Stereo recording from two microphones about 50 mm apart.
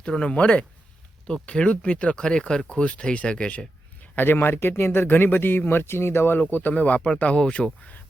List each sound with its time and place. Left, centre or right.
0.0 s speech: centre
4.1 s speech: left
6.4 s speech: left